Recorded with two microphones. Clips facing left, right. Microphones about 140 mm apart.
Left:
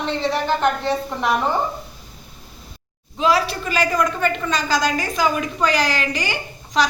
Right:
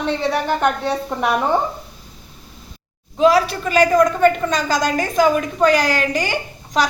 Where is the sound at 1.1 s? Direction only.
55° right (ahead or behind).